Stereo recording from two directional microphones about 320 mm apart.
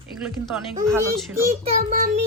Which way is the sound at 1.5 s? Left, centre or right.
Right.